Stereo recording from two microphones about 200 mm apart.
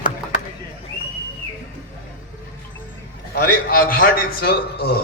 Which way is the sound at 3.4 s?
45° left (ahead or behind).